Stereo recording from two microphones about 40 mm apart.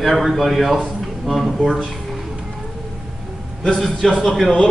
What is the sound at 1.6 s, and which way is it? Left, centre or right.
Speech, centre.